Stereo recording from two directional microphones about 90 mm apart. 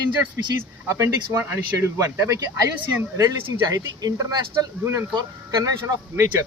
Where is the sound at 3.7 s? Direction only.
40° right (ahead or behind).